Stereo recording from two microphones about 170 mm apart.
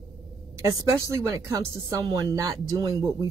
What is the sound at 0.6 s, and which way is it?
A woman's voice, 20° right (ahead or behind).